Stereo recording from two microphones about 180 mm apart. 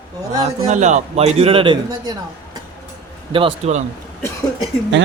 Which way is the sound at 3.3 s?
30° right (ahead or behind).